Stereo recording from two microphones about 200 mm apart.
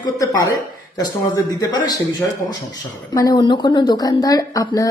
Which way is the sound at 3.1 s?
20° left (ahead or behind).